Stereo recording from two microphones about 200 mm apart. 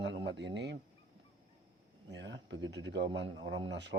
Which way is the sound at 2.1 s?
60° right (ahead or behind).